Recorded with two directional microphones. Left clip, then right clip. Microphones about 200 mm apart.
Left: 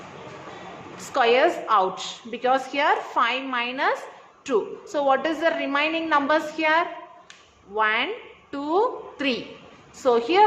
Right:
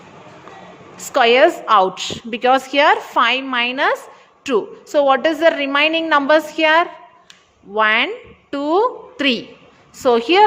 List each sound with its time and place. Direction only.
0.9 s a woman's voice: 40° right (ahead or behind)